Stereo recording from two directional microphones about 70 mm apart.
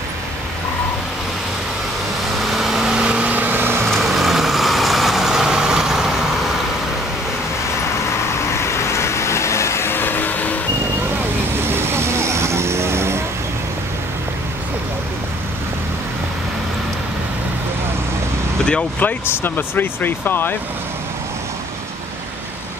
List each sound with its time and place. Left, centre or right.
2.5 s a sound: centre; by 3.8 s right
3.8 s vehicle: centre
8.5 s vehicle: left
11.7 s vehicle: right
18.7 s speech: centre
19.2 s speech: left